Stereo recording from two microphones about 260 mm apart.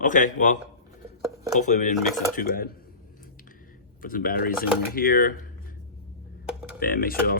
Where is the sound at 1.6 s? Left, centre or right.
Left.